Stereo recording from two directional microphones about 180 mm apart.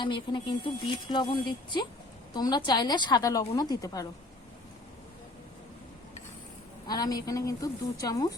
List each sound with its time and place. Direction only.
0.0 s speech: 25° left (ahead or behind)
6.8 s speech: 20° left (ahead or behind)